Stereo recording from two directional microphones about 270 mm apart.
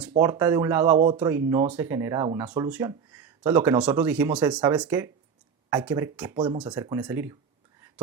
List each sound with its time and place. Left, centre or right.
0.1 s speech: centre
6.3 s speech: centre